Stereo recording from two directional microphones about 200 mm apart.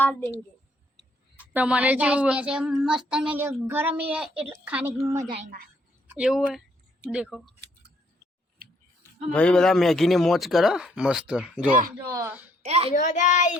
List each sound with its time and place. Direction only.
0.0 s a woman's voice: 10° left (ahead or behind)
1.5 s a woman's voice: 5° right (ahead or behind)
9.3 s a woman's voice: 5° left (ahead or behind); by 12.5 s 10° right (ahead or behind)
12.6 s a woman's voice: 30° right (ahead or behind)
12.9 s a child's voice: 40° left (ahead or behind)